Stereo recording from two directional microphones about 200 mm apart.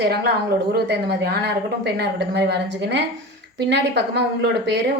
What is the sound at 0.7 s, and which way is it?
A woman's voice, 55° right (ahead or behind).